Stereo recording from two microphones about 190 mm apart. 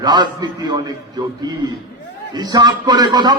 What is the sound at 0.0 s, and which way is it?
Speech, 20° right (ahead or behind).